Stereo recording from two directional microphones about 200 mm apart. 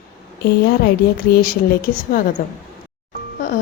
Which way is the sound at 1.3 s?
50° left (ahead or behind).